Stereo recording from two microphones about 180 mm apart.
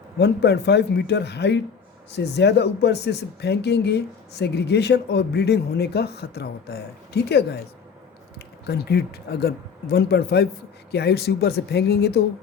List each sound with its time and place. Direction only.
0.2 s speech: 70° left (ahead or behind)